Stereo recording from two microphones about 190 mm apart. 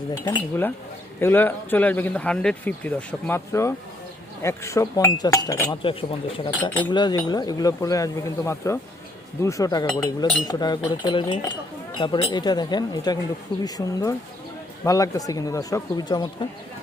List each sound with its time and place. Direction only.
0.3 s speech: 20° left (ahead or behind)
5.8 s speech: 30° left (ahead or behind)